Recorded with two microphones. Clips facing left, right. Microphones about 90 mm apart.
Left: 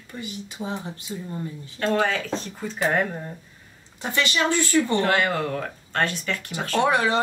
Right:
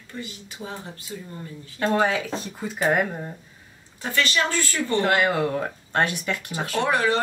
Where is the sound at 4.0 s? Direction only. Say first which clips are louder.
Even; 20° left (ahead or behind).